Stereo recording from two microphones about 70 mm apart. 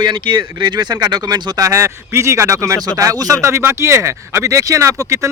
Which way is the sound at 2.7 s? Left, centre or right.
Right.